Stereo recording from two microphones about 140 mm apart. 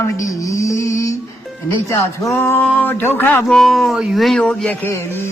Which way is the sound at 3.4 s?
Centre (ahead or behind).